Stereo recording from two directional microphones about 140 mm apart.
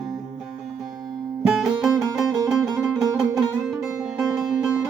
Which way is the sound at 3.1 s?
25° right (ahead or behind).